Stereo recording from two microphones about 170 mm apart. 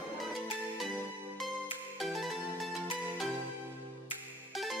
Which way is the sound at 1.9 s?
Centre (ahead or behind).